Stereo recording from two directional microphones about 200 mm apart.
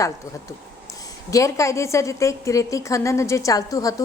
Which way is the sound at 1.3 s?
15° left (ahead or behind).